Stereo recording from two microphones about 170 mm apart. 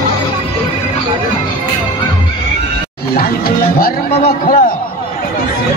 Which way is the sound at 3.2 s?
60° left (ahead or behind).